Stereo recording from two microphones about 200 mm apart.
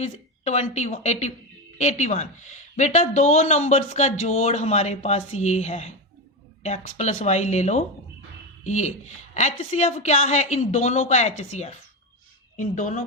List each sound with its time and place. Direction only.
0.0 s a man's voice: 35° left (ahead or behind)
12.5 s a man's voice: 40° left (ahead or behind)